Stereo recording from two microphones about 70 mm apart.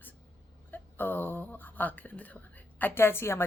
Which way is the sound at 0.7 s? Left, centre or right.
Left.